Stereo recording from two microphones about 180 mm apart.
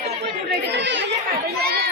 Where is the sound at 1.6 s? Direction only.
60° right (ahead or behind).